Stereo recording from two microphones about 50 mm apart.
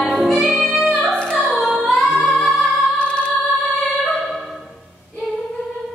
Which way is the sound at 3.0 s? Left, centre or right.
Left.